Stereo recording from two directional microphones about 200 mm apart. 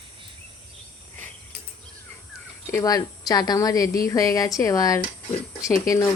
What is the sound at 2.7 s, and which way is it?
A woman's voice, 20° left (ahead or behind).